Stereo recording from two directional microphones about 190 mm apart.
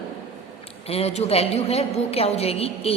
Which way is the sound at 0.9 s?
35° left (ahead or behind).